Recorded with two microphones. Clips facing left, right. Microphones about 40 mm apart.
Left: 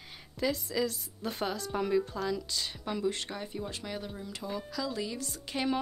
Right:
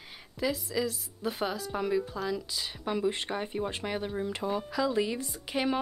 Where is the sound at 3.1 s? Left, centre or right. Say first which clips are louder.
Right 4 dB; right.